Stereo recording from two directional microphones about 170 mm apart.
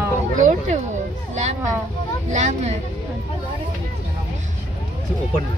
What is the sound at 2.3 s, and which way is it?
Speech, 40° right (ahead or behind).